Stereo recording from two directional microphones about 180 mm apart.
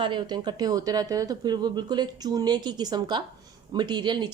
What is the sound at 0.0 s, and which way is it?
Speech, 25° right (ahead or behind).